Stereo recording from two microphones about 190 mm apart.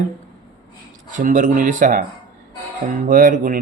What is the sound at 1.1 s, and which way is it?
Speech, 40° right (ahead or behind).